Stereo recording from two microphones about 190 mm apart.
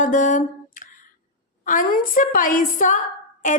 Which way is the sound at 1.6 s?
45° left (ahead or behind).